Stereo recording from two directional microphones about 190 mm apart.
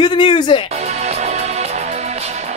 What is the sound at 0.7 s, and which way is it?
Music, 35° right (ahead or behind).